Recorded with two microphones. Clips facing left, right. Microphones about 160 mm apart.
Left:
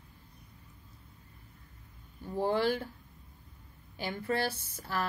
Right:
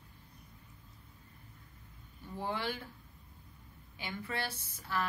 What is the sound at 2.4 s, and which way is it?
Speech, 40° left (ahead or behind).